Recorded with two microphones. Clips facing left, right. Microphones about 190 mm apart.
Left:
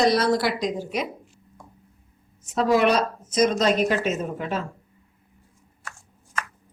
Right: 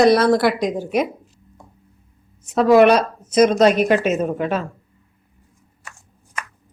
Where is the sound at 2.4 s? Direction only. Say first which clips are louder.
Right 8 dB; 65° right (ahead or behind).